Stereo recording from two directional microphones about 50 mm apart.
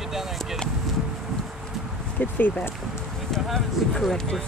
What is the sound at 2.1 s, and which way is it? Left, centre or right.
Speech, left.